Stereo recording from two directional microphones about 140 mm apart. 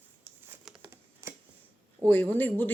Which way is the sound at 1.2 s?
20° right (ahead or behind).